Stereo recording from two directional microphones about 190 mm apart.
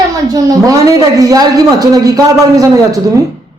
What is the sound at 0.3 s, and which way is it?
A woman's voice, 20° right (ahead or behind).